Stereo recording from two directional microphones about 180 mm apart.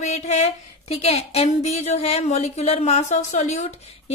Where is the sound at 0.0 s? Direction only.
40° left (ahead or behind).